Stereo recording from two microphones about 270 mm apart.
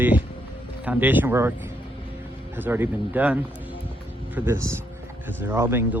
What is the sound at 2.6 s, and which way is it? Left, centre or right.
Speech, centre.